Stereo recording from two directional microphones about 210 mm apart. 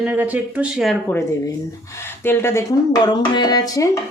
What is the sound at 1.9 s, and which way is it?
Speech, 10° left (ahead or behind).